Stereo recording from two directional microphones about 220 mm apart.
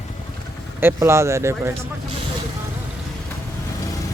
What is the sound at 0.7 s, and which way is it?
Speech, 10° right (ahead or behind).